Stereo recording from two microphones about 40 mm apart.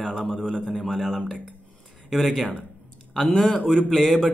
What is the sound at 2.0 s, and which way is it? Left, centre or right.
Speech, centre.